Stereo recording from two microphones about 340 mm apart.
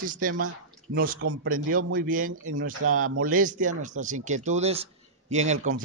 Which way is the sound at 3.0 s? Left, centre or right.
Right.